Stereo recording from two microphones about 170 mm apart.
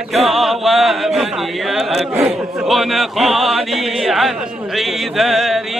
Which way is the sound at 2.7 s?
Centre (ahead or behind).